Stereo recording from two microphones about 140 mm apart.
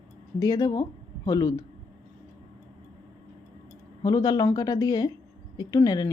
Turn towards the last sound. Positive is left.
turn(degrees=25)  # may be behind; listen again after turning